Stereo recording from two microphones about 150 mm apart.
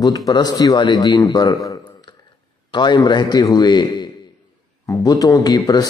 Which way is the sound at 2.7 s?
30° left (ahead or behind).